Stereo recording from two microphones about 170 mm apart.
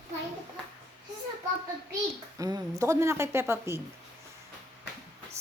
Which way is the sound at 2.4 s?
20° right (ahead or behind).